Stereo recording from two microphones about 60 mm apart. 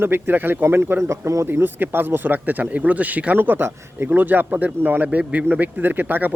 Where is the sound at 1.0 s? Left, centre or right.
Right.